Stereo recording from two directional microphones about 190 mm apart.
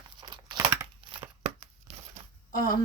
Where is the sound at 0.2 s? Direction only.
20° right (ahead or behind).